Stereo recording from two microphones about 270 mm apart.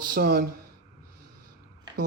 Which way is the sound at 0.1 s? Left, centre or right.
Right.